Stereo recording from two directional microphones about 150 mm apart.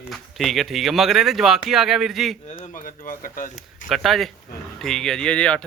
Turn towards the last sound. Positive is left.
turn(degrees=5)  # may be behind; listen again after turning